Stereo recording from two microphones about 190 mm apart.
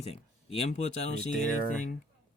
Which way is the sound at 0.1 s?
30° left (ahead or behind).